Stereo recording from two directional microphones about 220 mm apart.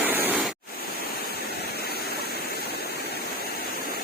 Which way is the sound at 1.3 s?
45° left (ahead or behind).